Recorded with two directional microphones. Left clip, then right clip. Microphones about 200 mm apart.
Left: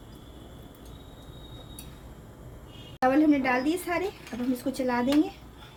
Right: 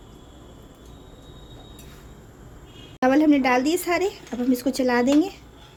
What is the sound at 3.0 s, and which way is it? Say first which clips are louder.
A woman's voice: right 4 dB; 45° right (ahead or behind).